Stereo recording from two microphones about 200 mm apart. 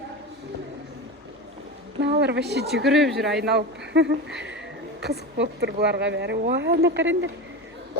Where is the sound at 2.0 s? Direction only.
60° right (ahead or behind).